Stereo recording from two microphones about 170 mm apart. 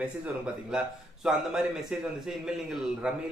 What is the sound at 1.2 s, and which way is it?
Speech, 5° right (ahead or behind).